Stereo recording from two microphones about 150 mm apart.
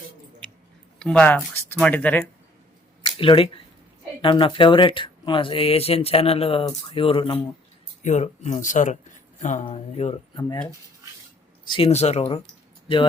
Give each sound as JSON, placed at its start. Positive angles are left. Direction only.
{"t": 0.9, "sound": "speech", "side_deg": 5}
{"t": 3.0, "sound": "a sound", "side_deg": 35}
{"t": 4.2, "sound": "speech", "side_deg": 35}
{"t": 8.0, "sound": "speech", "side_deg": 50}
{"t": 11.6, "sound": "a sound", "side_deg": 30}
{"t": 11.9, "sound": "speech", "side_deg": 45}